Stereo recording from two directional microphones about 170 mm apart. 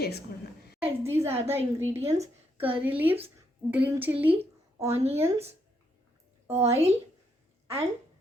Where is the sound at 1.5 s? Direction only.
15° right (ahead or behind).